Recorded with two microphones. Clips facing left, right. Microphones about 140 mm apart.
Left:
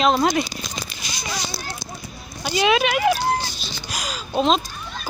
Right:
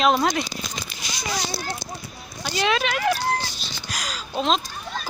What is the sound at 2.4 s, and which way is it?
Speech, 10° left (ahead or behind).